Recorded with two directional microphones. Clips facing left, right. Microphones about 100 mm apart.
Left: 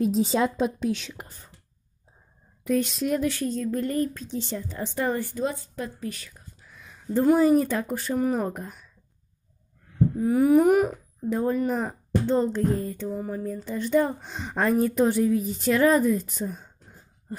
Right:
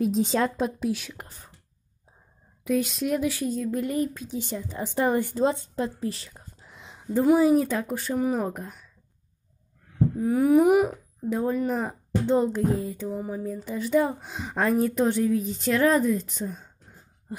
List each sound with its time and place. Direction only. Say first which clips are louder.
0.0 s music: left 1 dB; centre (ahead or behind)
2.6 s speech: left 1 dB; centre (ahead or behind); by 7.1 s 20° right (ahead or behind)
7.1 s music: even; 5° right (ahead or behind)
10.1 s music: left 1 dB; centre (ahead or behind)
17.3 s laughter: even; 5° right (ahead or behind)